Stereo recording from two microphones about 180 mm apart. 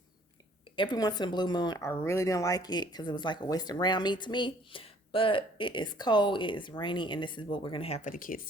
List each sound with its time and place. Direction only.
0.8 s speech: 25° left (ahead or behind); by 8.4 s 50° left (ahead or behind)